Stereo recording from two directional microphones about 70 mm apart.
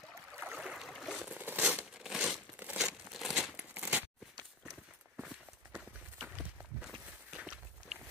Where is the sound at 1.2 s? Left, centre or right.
Right.